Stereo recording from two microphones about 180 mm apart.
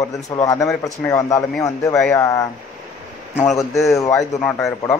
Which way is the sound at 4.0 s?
15° left (ahead or behind).